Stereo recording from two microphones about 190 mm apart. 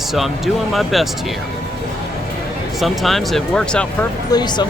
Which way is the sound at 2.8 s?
Centre (ahead or behind).